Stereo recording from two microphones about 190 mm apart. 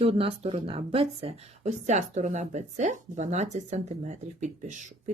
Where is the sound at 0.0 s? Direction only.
30° right (ahead or behind).